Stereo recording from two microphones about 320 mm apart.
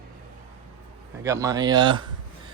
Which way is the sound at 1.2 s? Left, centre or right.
Centre.